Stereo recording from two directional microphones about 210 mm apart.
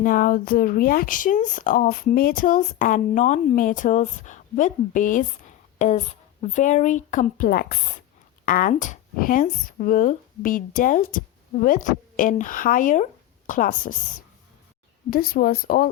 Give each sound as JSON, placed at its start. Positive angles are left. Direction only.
{"t": 0.0, "sound": "speech", "side_deg": 40}